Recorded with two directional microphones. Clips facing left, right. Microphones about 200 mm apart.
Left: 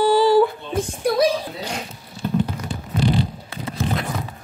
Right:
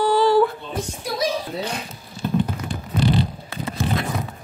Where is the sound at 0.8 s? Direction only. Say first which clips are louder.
Left 8 dB; 55° left (ahead or behind).